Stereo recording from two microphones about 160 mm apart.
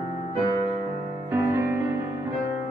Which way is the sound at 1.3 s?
15° right (ahead or behind).